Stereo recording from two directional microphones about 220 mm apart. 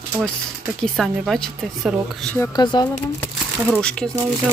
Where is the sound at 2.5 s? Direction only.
20° left (ahead or behind).